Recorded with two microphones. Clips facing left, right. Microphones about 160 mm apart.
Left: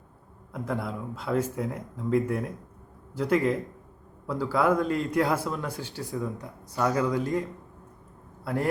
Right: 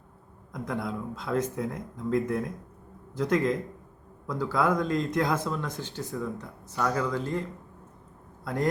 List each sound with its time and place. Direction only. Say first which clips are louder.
0.5 s speech: left 1 dB; 5° left (ahead or behind)
8.4 s speech: even; 10° left (ahead or behind)